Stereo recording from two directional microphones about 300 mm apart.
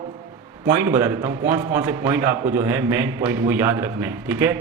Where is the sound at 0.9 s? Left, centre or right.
Centre.